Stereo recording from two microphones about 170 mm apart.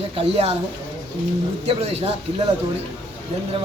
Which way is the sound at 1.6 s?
35° right (ahead or behind).